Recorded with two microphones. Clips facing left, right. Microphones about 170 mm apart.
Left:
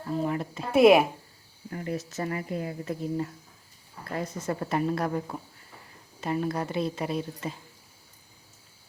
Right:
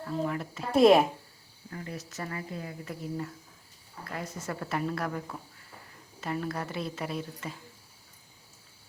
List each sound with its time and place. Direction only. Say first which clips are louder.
0.1 s a woman's voice: left 3 dB; 20° left (ahead or behind)
0.7 s speech: left 2 dB; 5° left (ahead or behind)
1.7 s speech: left 7 dB; 45° left (ahead or behind)
2.0 s a woman's voice: left 6 dB; 25° left (ahead or behind)